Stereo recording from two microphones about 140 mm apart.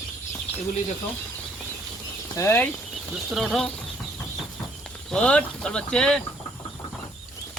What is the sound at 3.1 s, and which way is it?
Speech, centre (ahead or behind).